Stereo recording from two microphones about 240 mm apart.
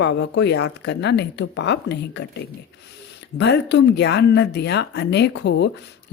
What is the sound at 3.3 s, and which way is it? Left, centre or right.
Speech, left.